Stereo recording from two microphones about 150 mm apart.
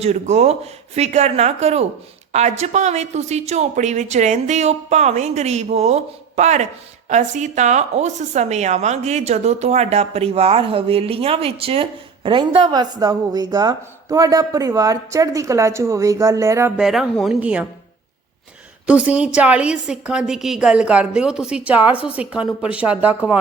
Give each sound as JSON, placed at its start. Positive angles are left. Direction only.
{"t": 0.0, "sound": "a woman's voice", "side_deg": -45}
{"t": 16.7, "sound": "speech", "side_deg": -5}
{"t": 18.9, "sound": "a woman's voice", "side_deg": -10}